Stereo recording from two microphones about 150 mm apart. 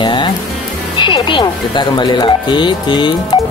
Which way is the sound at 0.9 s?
30° left (ahead or behind).